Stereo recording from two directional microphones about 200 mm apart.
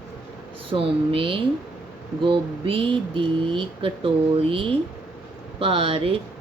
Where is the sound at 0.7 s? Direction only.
25° right (ahead or behind).